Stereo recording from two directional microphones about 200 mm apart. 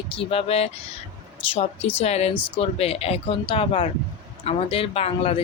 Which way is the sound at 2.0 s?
30° left (ahead or behind).